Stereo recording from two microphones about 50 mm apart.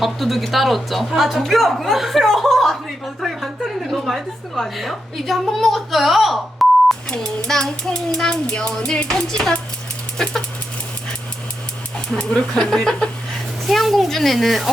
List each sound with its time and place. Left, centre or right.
0.0 s a man's voice: centre
7.1 s a child's voice: centre
8.8 s music: centre
10.2 s a child's voice: centre
12.1 s a child's voice: centre
13.7 s a sound: centre